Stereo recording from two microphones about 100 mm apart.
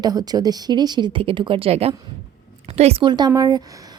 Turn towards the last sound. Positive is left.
turn(degrees=-45)  # may be behind; listen again after turning